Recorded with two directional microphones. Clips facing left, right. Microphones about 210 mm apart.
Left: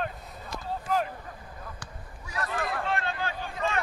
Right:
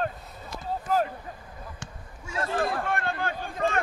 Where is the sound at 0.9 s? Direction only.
40° right (ahead or behind).